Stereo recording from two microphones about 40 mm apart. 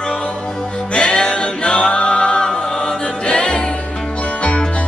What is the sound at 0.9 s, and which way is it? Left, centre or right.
Music, centre.